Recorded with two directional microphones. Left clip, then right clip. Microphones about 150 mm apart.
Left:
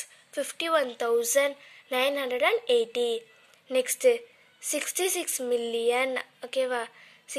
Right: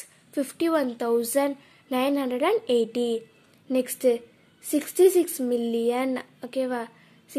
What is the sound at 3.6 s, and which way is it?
A woman's voice, 10° left (ahead or behind).